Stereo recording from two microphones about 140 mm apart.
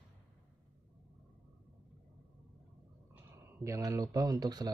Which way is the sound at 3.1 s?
20° right (ahead or behind).